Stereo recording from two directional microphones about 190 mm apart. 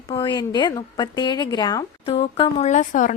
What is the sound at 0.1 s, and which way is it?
Speech, 25° left (ahead or behind).